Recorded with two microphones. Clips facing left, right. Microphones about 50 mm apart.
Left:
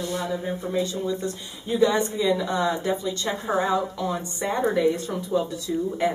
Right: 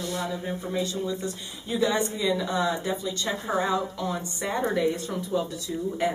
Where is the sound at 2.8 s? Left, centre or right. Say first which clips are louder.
Left 3 dB; centre.